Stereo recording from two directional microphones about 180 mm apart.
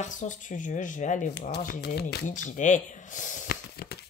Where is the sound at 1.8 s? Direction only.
60° left (ahead or behind).